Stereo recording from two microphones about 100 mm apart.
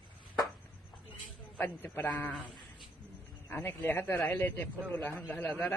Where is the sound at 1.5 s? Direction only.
20° left (ahead or behind).